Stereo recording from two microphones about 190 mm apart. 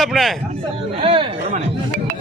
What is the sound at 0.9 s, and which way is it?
Chatter, 25° right (ahead or behind).